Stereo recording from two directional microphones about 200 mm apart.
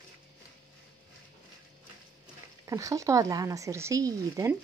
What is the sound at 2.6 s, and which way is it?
Speech, 15° right (ahead or behind).